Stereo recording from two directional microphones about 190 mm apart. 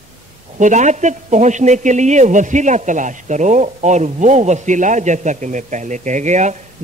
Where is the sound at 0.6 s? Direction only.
40° right (ahead or behind).